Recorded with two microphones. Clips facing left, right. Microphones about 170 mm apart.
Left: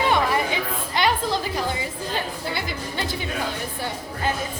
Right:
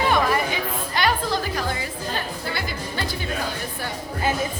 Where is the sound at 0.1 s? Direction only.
20° left (ahead or behind).